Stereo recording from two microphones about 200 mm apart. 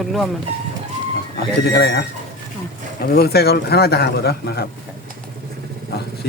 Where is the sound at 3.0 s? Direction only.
50° left (ahead or behind).